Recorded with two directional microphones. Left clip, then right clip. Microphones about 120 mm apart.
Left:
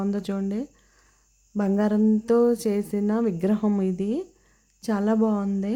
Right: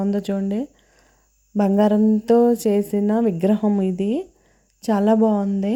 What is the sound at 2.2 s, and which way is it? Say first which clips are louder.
Speech: right 5 dB; 20° right (ahead or behind).